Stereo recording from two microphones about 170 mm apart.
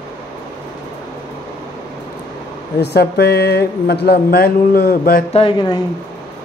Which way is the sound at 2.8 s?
75° left (ahead or behind).